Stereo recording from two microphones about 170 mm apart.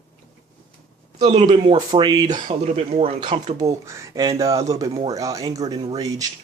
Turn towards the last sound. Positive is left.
turn(degrees=-20)  # may be behind; listen again after turning